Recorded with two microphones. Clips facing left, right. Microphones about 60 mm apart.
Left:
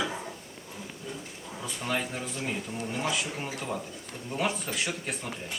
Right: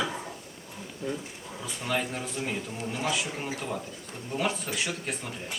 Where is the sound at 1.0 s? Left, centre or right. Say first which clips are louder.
Right 8 dB; right.